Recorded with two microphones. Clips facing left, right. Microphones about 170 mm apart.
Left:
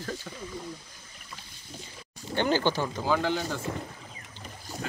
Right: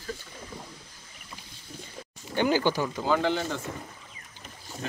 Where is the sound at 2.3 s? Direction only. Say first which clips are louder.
Right 1 dB; 10° right (ahead or behind).